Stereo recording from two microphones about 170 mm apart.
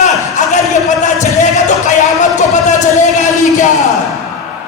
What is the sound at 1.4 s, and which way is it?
Music, 45° left (ahead or behind).